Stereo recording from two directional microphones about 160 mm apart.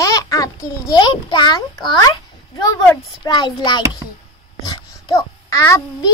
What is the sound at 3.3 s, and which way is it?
A child's voice, 25° left (ahead or behind).